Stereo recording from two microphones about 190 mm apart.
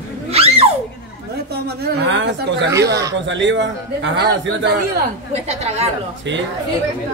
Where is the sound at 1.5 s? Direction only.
65° right (ahead or behind).